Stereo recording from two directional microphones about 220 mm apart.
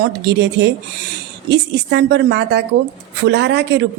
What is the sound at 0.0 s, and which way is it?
Speech, 50° right (ahead or behind).